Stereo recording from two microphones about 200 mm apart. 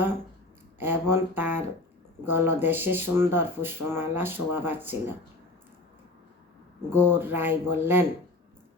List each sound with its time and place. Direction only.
0.8 s speech: 10° right (ahead or behind)
6.9 s speech: 10° right (ahead or behind)